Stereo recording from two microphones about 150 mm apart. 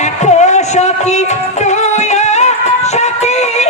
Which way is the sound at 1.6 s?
50° left (ahead or behind).